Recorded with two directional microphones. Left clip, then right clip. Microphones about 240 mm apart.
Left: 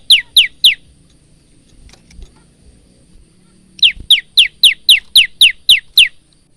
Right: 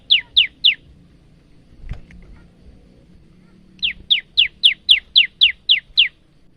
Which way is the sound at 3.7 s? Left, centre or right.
Left.